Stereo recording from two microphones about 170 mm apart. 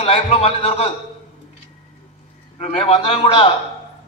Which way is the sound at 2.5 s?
35° left (ahead or behind).